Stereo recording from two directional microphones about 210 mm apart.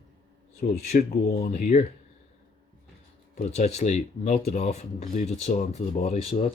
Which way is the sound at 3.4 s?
30° left (ahead or behind).